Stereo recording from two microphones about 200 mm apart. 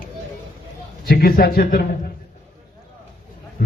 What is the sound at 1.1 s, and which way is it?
Speech, 50° left (ahead or behind).